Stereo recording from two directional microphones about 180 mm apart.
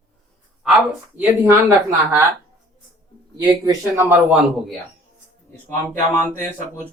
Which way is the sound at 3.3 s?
20° right (ahead or behind).